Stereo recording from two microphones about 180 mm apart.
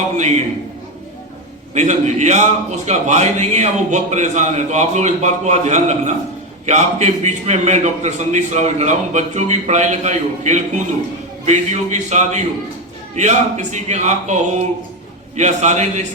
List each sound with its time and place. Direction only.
0.2 s a man's voice: 40° right (ahead or behind)
1.7 s a man's voice: 40° right (ahead or behind)